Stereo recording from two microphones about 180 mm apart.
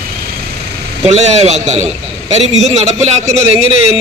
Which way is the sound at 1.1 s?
35° right (ahead or behind).